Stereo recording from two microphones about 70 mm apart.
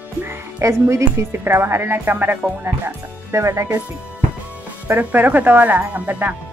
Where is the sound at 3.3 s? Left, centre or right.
Right.